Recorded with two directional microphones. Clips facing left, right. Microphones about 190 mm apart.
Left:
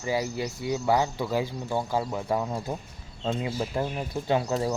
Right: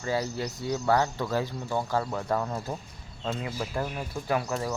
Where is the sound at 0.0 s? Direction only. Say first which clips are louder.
Left 1 dB; 10° left (ahead or behind).